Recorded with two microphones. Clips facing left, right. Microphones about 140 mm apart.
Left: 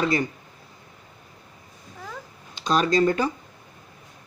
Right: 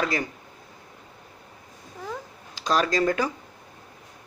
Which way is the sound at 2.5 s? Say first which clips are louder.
Left 2 dB; 90° right.